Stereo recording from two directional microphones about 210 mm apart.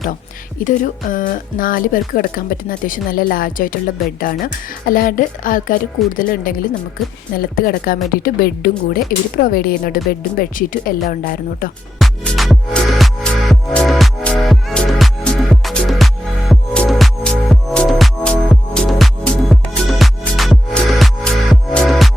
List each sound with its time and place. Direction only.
0.6 s speech: 40° left (ahead or behind)
11.9 s music: centre (ahead or behind)